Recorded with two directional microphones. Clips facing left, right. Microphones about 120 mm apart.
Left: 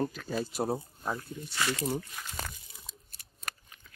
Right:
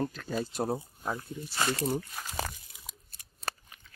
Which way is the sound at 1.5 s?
35° right (ahead or behind).